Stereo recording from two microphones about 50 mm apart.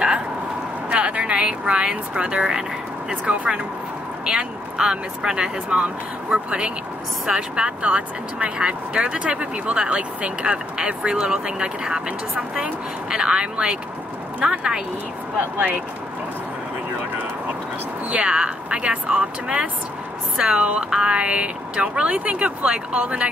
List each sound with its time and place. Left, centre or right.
0.8 s vehicle: right
1.7 s speech: right
18.1 s speech: centre